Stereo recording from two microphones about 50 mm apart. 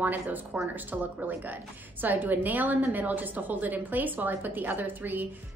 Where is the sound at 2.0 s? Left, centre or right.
Right.